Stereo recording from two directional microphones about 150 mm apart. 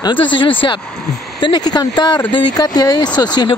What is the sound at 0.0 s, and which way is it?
Speech, 30° left (ahead or behind).